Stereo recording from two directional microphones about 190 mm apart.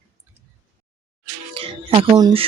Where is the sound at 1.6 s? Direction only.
30° right (ahead or behind).